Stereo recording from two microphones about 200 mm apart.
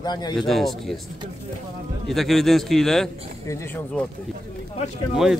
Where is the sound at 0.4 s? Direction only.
Centre (ahead or behind).